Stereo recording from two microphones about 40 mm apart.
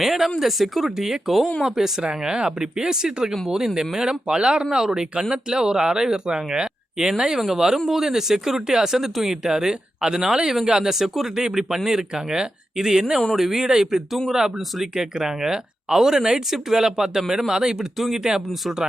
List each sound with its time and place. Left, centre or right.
0.0 s speech: centre; by 4.6 s right
4.6 s speech: centre
4.9 s speech: right
17.9 s speech: centre
18.2 s speech: centre